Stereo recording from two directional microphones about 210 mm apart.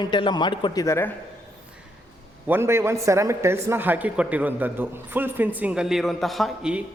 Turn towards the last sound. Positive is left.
turn(degrees=-5)  # may be behind; listen again after turning